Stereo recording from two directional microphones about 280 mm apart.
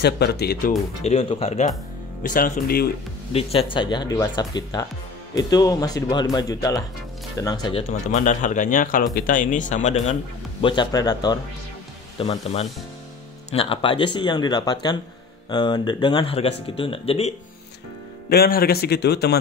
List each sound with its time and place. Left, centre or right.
0.0 s a man's voice: left
3.3 s speech: left
18.3 s a man's voice: left